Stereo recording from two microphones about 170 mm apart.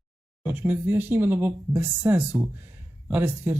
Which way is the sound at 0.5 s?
15° right (ahead or behind).